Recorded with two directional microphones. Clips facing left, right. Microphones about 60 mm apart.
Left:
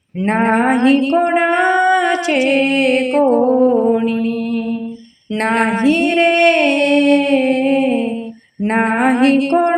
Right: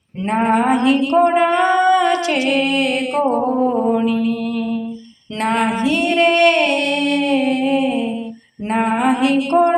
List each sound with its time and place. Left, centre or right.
0.3 s female singing: left
4.0 s mantra: left
5.4 s female singing: left